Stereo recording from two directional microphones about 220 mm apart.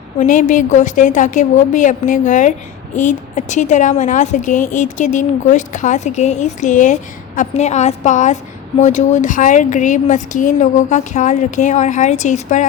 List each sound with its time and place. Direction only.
0.2 s a woman's voice: 35° left (ahead or behind)